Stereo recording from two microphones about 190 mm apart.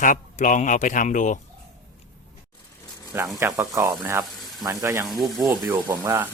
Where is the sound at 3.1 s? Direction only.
10° right (ahead or behind).